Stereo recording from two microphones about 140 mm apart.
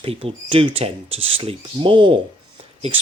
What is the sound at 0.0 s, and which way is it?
Speech, 40° right (ahead or behind).